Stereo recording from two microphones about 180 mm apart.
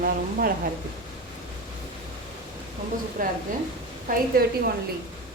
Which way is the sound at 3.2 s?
50° right (ahead or behind).